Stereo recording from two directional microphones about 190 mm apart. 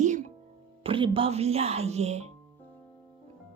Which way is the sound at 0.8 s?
30° right (ahead or behind).